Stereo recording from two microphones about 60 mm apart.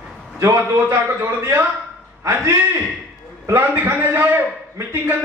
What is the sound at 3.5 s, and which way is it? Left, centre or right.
Speech, right.